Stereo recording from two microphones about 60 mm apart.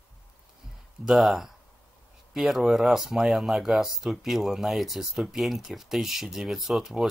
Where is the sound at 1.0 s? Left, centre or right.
Centre.